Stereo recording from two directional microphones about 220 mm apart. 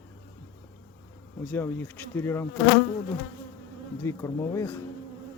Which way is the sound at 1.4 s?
10° left (ahead or behind).